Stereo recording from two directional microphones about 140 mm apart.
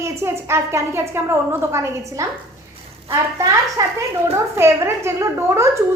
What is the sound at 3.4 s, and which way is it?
A woman's voice, 25° right (ahead or behind).